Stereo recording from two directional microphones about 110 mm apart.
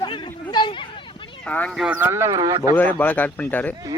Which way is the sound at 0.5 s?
45° left (ahead or behind).